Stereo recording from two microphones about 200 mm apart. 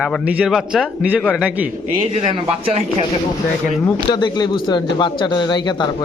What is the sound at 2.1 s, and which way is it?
Speech, 25° right (ahead or behind).